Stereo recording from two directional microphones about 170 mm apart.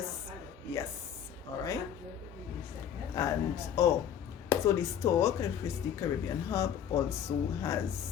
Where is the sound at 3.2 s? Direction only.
20° left (ahead or behind).